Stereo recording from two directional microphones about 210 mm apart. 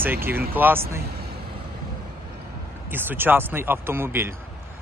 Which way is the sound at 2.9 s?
10° right (ahead or behind).